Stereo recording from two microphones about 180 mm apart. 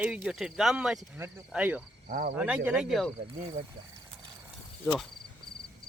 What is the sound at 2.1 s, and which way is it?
Speech, 50° right (ahead or behind).